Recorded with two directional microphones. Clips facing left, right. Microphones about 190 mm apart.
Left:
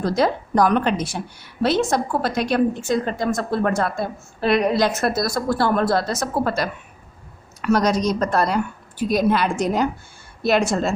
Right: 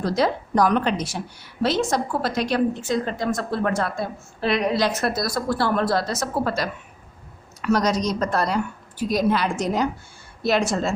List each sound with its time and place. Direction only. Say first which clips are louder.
0.0 s a woman's voice: left 2 dB; 50° left (ahead or behind)